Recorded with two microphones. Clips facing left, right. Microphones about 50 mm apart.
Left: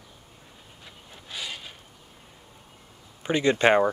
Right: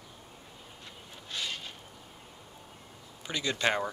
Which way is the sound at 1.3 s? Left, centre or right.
Centre.